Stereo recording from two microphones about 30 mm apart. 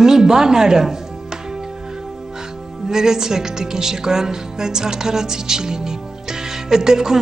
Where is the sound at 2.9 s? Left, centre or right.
Centre.